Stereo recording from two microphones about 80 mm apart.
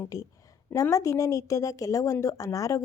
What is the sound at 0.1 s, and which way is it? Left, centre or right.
A woman's voice, left.